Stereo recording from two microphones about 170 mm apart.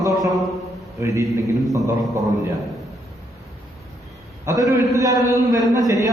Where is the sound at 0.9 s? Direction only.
20° right (ahead or behind).